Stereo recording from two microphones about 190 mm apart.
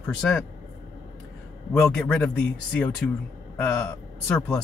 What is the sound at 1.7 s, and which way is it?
A man's voice, 5° left (ahead or behind).